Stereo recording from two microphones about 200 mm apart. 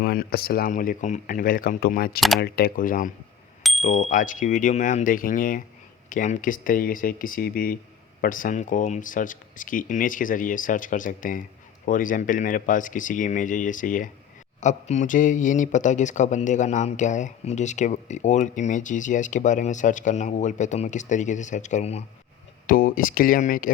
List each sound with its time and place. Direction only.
0.0 s speech: 50° left (ahead or behind)
3.6 s bicycle bell: centre (ahead or behind)
3.8 s speech: 40° left (ahead or behind)
22.6 s speech: 45° left (ahead or behind)